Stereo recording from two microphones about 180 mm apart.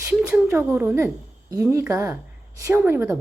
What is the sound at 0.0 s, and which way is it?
A woman's voice, 5° right (ahead or behind).